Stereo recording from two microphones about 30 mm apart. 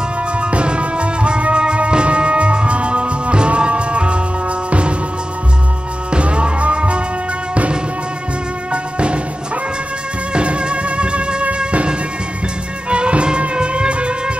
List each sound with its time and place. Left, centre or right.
0.4 s music: right
6.1 s music: right
8.7 s music: right
10.3 s music: right